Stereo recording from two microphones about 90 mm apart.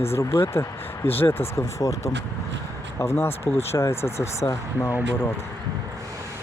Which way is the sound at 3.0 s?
30° left (ahead or behind).